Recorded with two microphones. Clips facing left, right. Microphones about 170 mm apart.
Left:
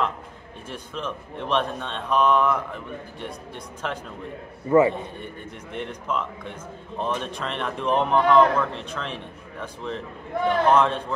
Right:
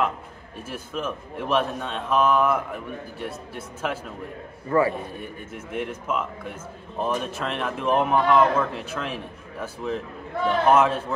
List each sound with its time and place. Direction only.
0.7 s a man's voice: 5° right (ahead or behind)
4.6 s a man's voice: 20° left (ahead or behind)
5.2 s a man's voice: 5° right (ahead or behind)